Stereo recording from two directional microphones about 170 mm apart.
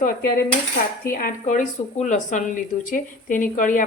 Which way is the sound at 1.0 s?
55° left (ahead or behind).